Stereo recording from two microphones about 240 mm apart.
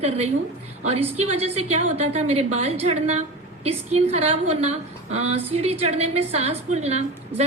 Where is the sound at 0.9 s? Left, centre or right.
Right.